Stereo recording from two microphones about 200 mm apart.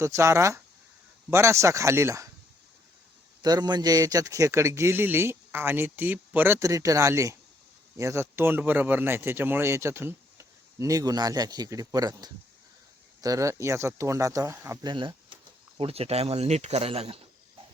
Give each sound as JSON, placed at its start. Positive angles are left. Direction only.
{"t": 0.0, "sound": "speech", "side_deg": -15}
{"t": 3.4, "sound": "speech", "side_deg": -20}